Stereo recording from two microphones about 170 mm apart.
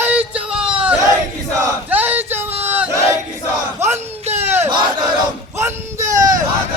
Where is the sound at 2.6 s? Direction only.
10° right (ahead or behind).